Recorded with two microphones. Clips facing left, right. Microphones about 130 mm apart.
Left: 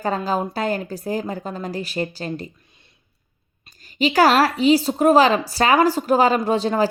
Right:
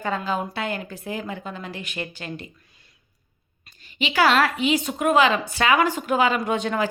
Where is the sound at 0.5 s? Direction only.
40° left (ahead or behind).